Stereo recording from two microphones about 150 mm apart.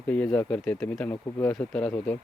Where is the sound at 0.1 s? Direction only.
10° left (ahead or behind).